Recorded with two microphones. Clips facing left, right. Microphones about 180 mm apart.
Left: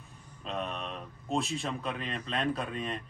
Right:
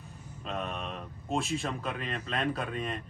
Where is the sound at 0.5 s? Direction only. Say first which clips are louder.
Even; centre (ahead or behind).